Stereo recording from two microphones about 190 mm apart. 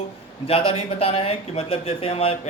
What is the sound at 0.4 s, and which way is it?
Speech, 30° left (ahead or behind).